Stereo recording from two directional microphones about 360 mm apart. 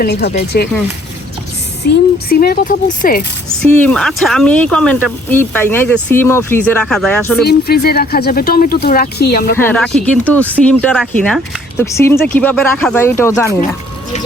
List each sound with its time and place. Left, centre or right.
0.0 s speech: left
2.1 s speech: left
3.6 s speech: centre
7.4 s speech: left
9.6 s speech: centre